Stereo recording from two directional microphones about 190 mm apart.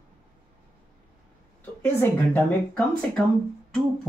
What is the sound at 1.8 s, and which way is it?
Speech, 10° left (ahead or behind).